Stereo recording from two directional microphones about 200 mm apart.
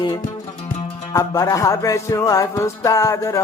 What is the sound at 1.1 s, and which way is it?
Music, 20° left (ahead or behind).